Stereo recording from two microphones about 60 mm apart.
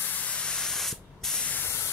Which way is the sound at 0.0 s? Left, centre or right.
Left.